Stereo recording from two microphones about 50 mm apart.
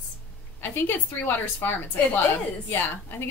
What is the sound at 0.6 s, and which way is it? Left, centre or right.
A woman's voice, left.